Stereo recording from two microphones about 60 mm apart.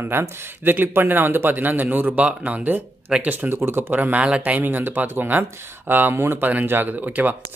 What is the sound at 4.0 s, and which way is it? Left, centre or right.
Speech, right.